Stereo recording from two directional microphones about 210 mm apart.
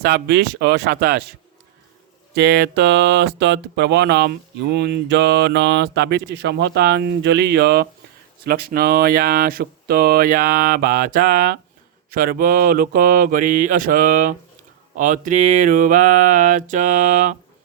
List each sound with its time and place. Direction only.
0.0 s speech: 50° right (ahead or behind)
2.3 s speech: 50° right (ahead or behind)
12.1 s mantra: 45° right (ahead or behind)